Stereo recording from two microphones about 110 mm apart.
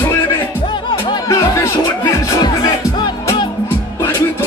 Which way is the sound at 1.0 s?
45° left (ahead or behind).